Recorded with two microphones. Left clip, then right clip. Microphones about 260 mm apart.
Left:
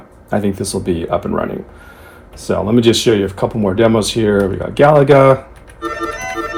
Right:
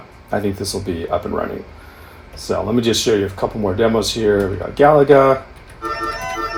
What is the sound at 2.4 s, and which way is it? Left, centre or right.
Speech, left.